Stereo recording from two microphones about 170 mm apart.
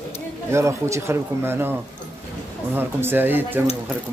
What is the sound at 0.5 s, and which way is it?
Speech, 15° right (ahead or behind).